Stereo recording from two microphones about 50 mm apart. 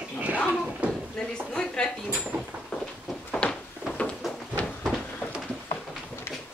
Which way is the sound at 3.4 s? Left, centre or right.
Left.